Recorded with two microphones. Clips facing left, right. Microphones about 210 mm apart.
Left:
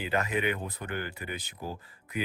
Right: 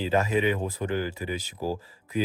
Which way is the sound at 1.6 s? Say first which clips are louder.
Right 8 dB; 35° right (ahead or behind).